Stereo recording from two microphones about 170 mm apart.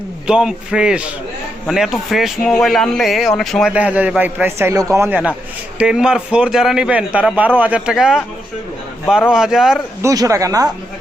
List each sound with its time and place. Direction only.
0.3 s speech: 5° right (ahead or behind)
9.3 s speech: 5° right (ahead or behind)
10.0 s speech: 20° right (ahead or behind)